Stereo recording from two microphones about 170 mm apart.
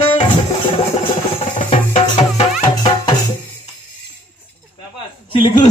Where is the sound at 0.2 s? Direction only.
30° left (ahead or behind).